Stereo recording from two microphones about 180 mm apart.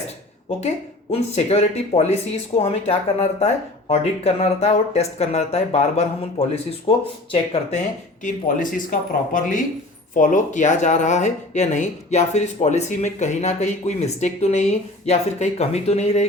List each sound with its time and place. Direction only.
1.1 s speech: 35° left (ahead or behind)
8.2 s speech: 45° left (ahead or behind)